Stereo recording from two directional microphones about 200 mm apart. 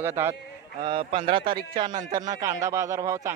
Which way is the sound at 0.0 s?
15° right (ahead or behind).